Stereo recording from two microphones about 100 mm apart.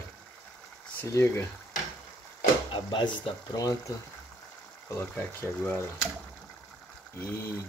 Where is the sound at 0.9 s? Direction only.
25° left (ahead or behind).